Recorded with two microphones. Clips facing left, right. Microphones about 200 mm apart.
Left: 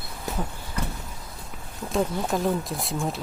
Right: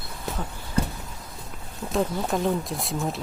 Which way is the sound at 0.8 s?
30° right (ahead or behind).